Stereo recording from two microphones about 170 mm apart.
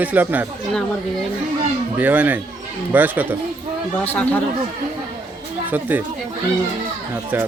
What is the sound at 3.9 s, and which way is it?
Speech, 10° left (ahead or behind).